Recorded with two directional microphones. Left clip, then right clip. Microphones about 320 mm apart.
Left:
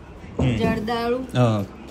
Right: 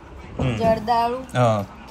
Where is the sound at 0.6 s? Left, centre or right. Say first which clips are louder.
Right 8 dB; centre.